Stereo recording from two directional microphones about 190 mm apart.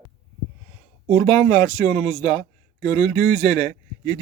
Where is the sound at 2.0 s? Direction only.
Centre (ahead or behind).